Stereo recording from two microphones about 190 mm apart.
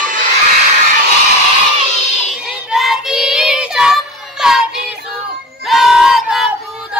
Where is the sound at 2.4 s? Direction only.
Centre (ahead or behind).